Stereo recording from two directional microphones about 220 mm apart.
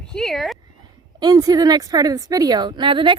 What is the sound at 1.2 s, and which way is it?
A woman's voice, 20° right (ahead or behind).